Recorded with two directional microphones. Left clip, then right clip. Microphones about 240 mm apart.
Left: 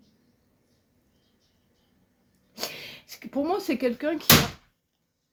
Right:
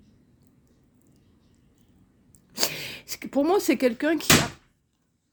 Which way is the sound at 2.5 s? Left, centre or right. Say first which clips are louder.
Right 6 dB; right.